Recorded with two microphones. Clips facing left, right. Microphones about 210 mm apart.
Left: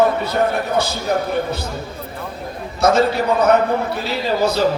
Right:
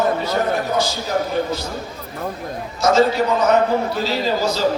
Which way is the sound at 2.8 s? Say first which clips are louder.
Even; 60° left (ahead or behind).